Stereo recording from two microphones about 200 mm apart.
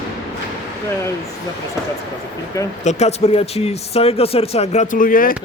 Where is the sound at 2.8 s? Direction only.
30° left (ahead or behind).